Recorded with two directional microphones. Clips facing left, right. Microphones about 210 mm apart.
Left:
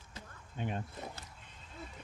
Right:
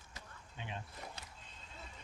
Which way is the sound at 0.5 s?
50° left (ahead or behind).